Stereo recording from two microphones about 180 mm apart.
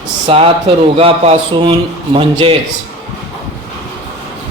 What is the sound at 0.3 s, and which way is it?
Speech, 30° right (ahead or behind).